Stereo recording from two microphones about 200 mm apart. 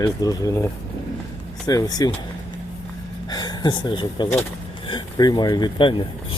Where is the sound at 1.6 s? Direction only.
20° left (ahead or behind).